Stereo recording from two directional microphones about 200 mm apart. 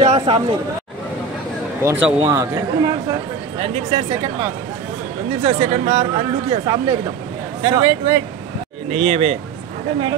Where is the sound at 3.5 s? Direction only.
30° right (ahead or behind).